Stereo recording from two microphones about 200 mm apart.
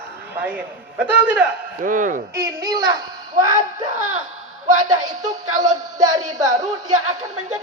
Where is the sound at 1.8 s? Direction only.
40° right (ahead or behind).